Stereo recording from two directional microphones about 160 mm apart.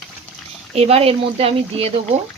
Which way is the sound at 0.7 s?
40° right (ahead or behind).